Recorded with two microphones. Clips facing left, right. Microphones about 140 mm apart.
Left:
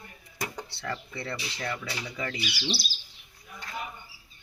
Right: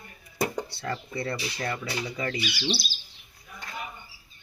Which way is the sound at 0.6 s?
40° right (ahead or behind).